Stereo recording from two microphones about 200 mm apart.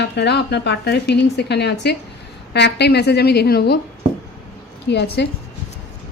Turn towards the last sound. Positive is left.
turn(degrees=60)  # may be behind; listen again after turning